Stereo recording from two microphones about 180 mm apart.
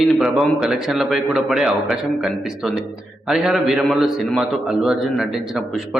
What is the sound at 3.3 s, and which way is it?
A man's voice, centre (ahead or behind).